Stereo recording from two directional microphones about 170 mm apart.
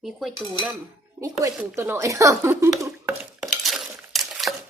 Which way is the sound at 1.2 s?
20° right (ahead or behind).